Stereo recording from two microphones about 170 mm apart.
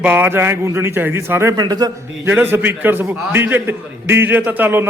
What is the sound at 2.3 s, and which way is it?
A man's voice, 10° right (ahead or behind).